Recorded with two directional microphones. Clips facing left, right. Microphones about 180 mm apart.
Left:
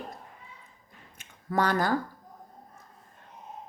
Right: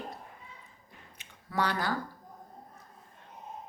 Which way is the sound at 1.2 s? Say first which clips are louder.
Left 4 dB; 45° left (ahead or behind).